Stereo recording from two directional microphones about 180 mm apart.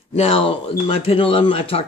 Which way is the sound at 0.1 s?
35° left (ahead or behind).